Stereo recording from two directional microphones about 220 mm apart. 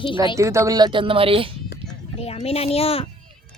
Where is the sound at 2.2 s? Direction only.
25° left (ahead or behind).